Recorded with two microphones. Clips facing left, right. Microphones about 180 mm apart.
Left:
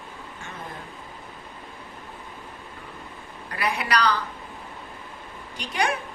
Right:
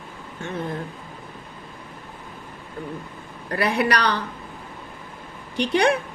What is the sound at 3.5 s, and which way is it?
Speech, 60° right (ahead or behind).